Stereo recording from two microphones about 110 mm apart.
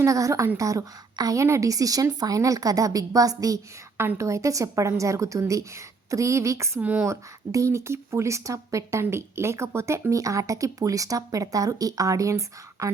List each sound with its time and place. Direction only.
0.0 s a woman's voice: 30° right (ahead or behind)
6.7 s speech: 15° right (ahead or behind)
7.1 s speech: 30° right (ahead or behind)